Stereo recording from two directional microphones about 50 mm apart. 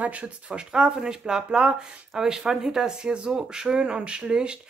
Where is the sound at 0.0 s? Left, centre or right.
Right.